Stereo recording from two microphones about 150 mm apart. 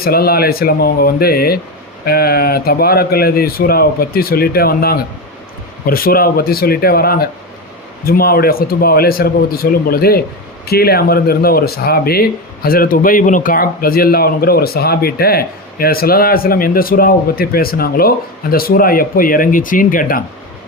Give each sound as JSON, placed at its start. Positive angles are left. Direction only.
{"t": 0.0, "sound": "speech", "side_deg": 90}
{"t": 5.8, "sound": "a man's voice", "side_deg": 75}
{"t": 12.6, "sound": "a man's voice", "side_deg": 75}